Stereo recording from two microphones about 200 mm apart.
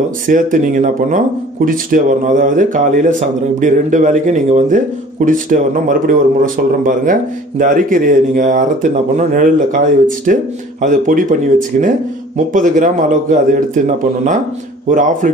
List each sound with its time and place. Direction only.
0.3 s speech: 40° right (ahead or behind)